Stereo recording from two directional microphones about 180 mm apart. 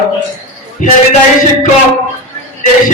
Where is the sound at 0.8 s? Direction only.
45° left (ahead or behind).